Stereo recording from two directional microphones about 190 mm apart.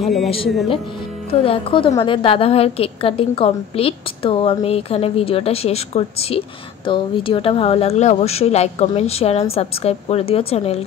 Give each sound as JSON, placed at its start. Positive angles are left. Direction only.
{"t": 0.0, "sound": "a man's voice", "side_deg": 0}
{"t": 1.3, "sound": "a woman's voice", "side_deg": 30}